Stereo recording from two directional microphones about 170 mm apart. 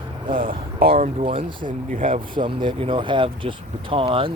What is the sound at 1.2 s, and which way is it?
Speech, 35° right (ahead or behind).